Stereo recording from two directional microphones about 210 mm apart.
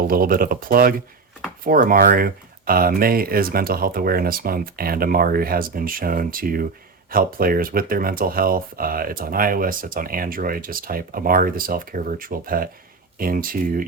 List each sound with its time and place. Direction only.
0.1 s speech: 45° right (ahead or behind)